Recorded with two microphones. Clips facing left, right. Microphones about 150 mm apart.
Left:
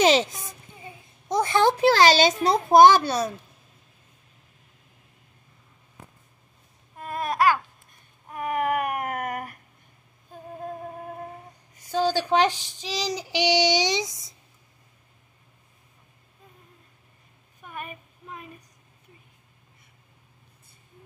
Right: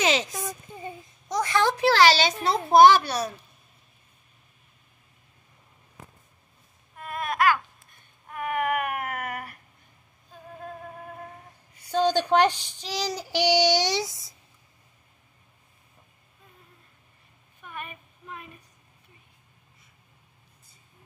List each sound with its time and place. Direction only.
0.0 s a sound: 30° left (ahead or behind)
1.3 s a child's voice: 30° left (ahead or behind)
2.1 s a child's voice: 45° left (ahead or behind)
2.8 s a woman's voice: 20° left (ahead or behind)
7.0 s babbling: 35° left (ahead or behind)
8.3 s baby cry: 30° left (ahead or behind)
10.6 s music: 30° left (ahead or behind)
11.9 s child singing: 10° left (ahead or behind)
17.6 s a sound: 40° left (ahead or behind)